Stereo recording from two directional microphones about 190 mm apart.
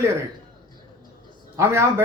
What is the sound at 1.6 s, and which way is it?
Speech, 15° right (ahead or behind).